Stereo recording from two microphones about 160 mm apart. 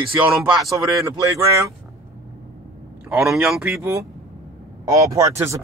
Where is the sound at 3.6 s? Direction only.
15° right (ahead or behind).